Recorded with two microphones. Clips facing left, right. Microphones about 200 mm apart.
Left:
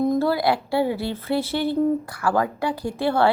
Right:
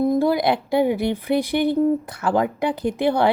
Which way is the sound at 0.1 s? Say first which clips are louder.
Right 2 dB; 15° right (ahead or behind).